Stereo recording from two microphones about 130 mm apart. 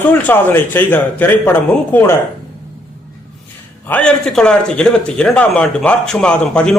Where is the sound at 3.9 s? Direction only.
5° left (ahead or behind).